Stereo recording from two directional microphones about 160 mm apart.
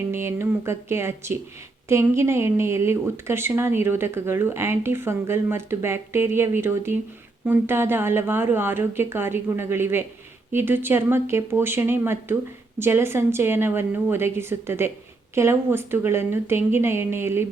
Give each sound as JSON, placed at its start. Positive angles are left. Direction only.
{"t": 0.1, "sound": "a woman's voice", "side_deg": -15}